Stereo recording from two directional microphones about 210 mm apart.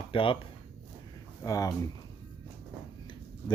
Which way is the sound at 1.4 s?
15° left (ahead or behind).